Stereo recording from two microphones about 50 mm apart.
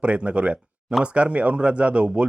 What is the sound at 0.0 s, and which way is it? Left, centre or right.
Speech, right.